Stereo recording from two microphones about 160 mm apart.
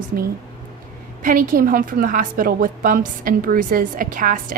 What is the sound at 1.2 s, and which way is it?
A woman's voice, 55° right (ahead or behind).